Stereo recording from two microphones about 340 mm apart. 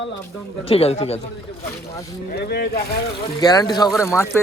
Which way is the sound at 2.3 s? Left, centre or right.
Left.